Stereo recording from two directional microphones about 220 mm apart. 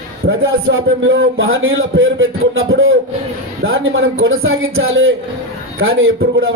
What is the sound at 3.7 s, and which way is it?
A man's voice, 65° right (ahead or behind).